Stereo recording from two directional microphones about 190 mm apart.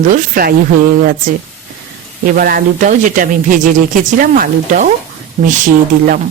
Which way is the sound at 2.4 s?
50° right (ahead or behind).